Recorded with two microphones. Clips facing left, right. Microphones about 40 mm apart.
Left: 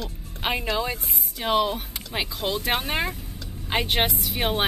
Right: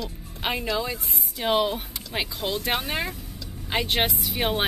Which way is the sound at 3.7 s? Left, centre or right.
Centre.